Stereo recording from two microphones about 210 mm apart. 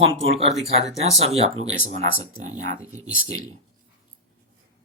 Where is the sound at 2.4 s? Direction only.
35° right (ahead or behind).